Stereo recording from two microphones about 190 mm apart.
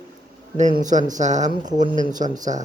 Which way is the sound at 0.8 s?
40° right (ahead or behind).